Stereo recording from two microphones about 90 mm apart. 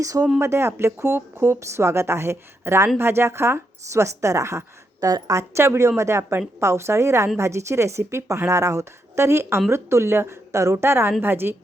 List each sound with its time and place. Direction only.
0.0 s a woman's voice: 40° right (ahead or behind)
0.3 s a woman's voice: 30° right (ahead or behind)